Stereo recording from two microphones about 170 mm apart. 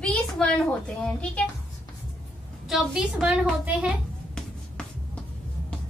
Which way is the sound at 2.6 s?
5° right (ahead or behind).